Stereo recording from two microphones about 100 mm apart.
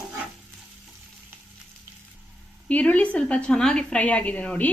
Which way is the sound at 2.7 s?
15° left (ahead or behind).